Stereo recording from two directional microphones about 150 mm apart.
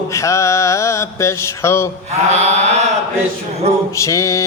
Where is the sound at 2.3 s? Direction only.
45° right (ahead or behind).